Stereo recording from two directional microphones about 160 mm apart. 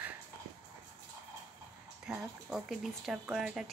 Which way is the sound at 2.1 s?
5° right (ahead or behind).